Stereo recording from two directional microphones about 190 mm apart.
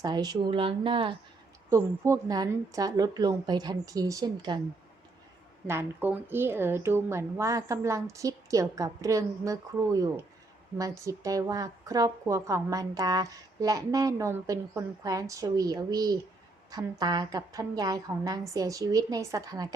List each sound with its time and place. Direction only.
0.0 s a woman's voice: 20° right (ahead or behind)
5.6 s a woman's voice: 10° right (ahead or behind)